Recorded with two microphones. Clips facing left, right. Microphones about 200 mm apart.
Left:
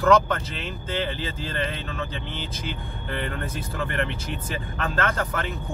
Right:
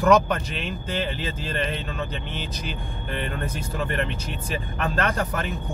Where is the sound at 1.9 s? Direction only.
15° right (ahead or behind).